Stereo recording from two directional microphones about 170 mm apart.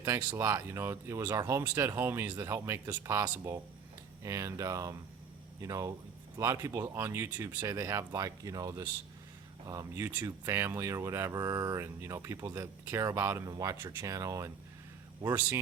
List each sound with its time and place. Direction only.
0.0 s speech: 20° right (ahead or behind)